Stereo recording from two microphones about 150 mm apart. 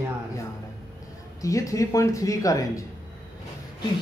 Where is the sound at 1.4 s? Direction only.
20° left (ahead or behind).